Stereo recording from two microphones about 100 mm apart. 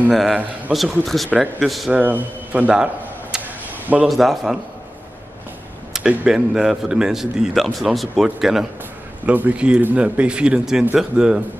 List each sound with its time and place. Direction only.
0.1 s a man's voice: centre (ahead or behind)
1.9 s a sound: 15° right (ahead or behind)
4.1 s a man's voice: centre (ahead or behind)
5.9 s a man's voice: 5° right (ahead or behind)
9.2 s speech: 15° right (ahead or behind)